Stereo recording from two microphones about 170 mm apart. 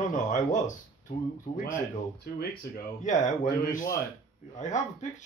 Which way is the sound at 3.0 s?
45° left (ahead or behind).